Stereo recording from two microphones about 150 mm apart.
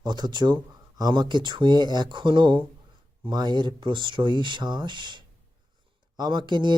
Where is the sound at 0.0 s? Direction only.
30° right (ahead or behind).